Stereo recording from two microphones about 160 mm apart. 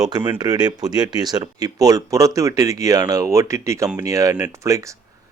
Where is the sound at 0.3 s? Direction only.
25° right (ahead or behind).